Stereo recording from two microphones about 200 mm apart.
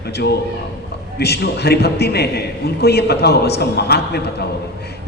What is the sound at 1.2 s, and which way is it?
A man's voice, 55° left (ahead or behind).